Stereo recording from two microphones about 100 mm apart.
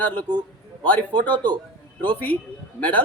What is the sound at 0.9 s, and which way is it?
Speech, 15° left (ahead or behind).